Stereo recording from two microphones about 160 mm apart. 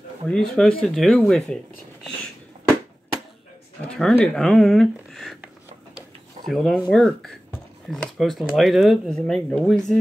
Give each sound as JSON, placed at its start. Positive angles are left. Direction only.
{"t": 0.3, "sound": "speech", "side_deg": 5}
{"t": 3.9, "sound": "speech", "side_deg": 5}
{"t": 6.5, "sound": "speech", "side_deg": 0}